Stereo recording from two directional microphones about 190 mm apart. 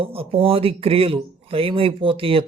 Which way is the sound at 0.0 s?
30° right (ahead or behind).